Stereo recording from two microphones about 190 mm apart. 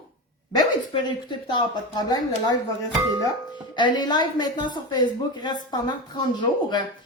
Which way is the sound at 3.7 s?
25° left (ahead or behind).